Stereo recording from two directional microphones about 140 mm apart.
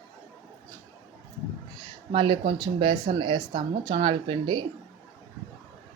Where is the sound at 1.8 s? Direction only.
35° right (ahead or behind).